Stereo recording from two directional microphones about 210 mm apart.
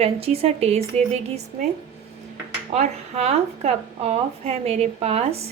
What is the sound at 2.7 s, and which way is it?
A woman's voice, 30° right (ahead or behind).